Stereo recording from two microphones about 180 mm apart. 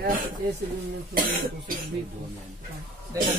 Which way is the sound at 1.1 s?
50° right (ahead or behind).